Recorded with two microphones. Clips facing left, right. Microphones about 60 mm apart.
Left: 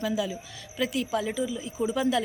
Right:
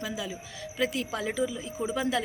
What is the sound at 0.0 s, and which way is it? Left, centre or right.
A woman's voice, right.